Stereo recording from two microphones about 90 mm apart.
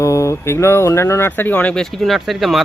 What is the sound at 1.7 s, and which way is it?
Speech, 5° left (ahead or behind).